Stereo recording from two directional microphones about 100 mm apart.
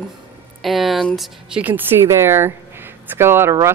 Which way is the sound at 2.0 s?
25° right (ahead or behind).